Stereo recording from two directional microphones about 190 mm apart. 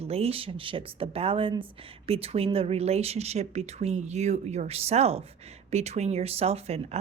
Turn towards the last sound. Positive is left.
turn(degrees=-35)  # may be behind; listen again after turning